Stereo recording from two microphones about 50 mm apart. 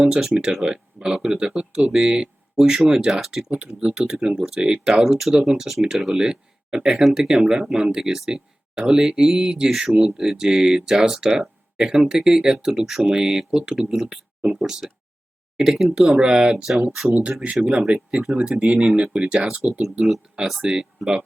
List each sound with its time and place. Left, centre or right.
0.0 s speech: centre
3.5 s speech: centre
20.3 s speech: centre